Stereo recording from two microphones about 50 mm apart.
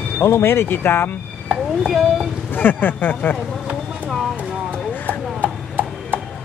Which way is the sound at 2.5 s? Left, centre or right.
Left.